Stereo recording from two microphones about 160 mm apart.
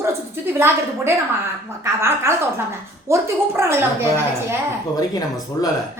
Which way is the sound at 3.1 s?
15° right (ahead or behind).